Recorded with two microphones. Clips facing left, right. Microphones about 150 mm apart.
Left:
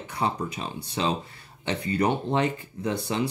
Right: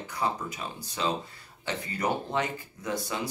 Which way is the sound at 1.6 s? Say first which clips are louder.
Left 5 dB; 25° left (ahead or behind).